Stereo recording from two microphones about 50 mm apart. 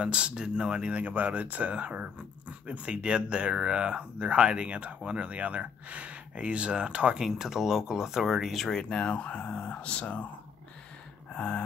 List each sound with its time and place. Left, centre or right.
0.0 s speech: right
7.2 s speech: centre
8.6 s speech: centre
11.3 s speech: left